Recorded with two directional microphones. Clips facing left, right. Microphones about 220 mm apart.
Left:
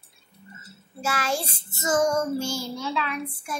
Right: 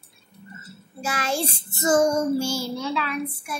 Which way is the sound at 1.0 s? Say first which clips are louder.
Even; 20° right (ahead or behind).